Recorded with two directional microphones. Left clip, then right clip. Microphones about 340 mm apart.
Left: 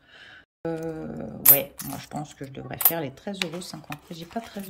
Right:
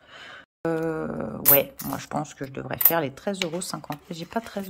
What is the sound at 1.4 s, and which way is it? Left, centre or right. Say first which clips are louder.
Speech: right 4 dB; centre.